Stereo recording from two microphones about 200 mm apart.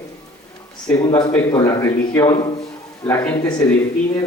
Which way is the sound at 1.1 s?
20° left (ahead or behind).